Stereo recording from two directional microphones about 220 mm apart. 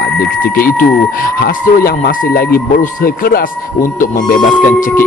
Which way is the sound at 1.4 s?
40° left (ahead or behind).